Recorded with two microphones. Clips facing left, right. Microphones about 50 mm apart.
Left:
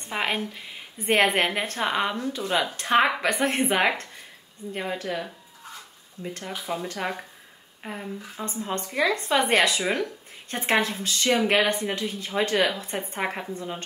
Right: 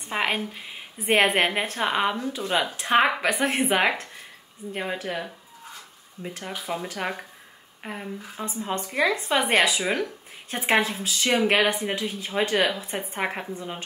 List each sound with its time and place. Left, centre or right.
0.0 s a woman's voice: centre